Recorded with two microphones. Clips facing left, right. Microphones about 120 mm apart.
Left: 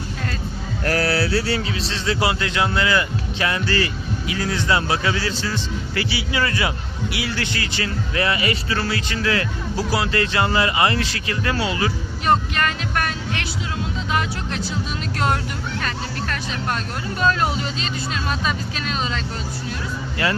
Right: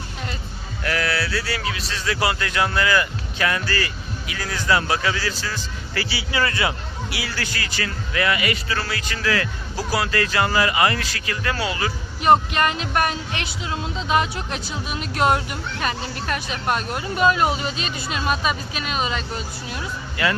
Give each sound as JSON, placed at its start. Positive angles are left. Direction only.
{"t": 0.9, "sound": "speech", "side_deg": 35}
{"t": 12.2, "sound": "speech", "side_deg": -20}
{"t": 20.2, "sound": "speech", "side_deg": 30}